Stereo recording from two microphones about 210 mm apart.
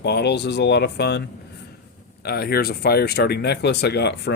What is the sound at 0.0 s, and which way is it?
Speech, 55° left (ahead or behind).